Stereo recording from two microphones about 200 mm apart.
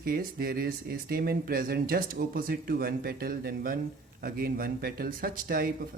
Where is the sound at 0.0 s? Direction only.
45° right (ahead or behind).